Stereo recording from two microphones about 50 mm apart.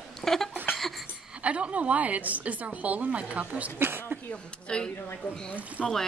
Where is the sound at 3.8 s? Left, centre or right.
Right.